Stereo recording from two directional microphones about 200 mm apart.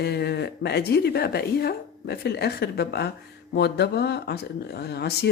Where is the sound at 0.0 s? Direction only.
55° left (ahead or behind).